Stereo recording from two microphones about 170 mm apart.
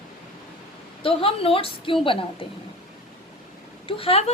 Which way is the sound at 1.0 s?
35° left (ahead or behind).